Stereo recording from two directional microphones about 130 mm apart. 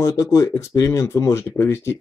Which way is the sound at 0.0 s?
25° left (ahead or behind).